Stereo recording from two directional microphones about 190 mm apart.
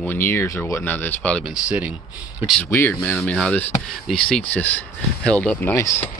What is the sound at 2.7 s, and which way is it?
Speech, 10° left (ahead or behind).